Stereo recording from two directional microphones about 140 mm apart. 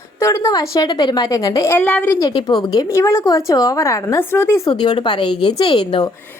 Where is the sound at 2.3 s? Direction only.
35° left (ahead or behind); by 4.6 s 15° left (ahead or behind).